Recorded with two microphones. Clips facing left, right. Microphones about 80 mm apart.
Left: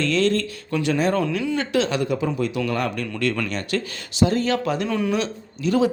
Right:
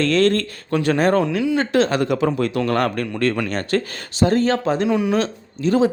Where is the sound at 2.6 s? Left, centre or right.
Right.